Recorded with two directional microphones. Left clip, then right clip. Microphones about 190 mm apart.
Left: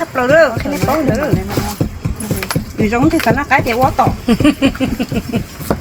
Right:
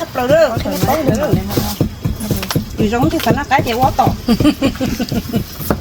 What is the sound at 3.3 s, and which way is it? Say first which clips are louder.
Speech: left 2 dB; 5° right (ahead or behind).